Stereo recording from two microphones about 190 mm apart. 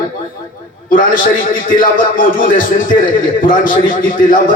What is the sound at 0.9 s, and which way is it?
A man's voice, 45° left (ahead or behind).